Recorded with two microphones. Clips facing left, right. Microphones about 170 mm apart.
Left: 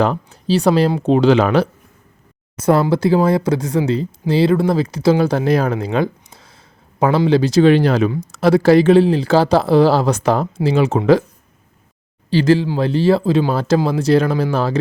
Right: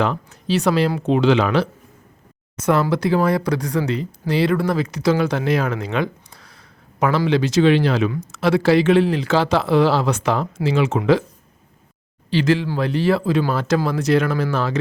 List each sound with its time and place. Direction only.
0.0 s speech: 35° left (ahead or behind)
2.6 s speech: 30° left (ahead or behind)
12.3 s speech: 35° left (ahead or behind)